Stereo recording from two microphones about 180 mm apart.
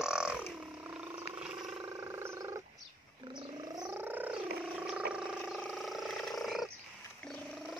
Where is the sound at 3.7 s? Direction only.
15° right (ahead or behind); by 6.7 s centre (ahead or behind).